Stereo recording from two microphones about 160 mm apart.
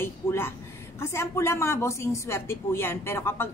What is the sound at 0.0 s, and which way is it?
A woman's voice, 15° left (ahead or behind).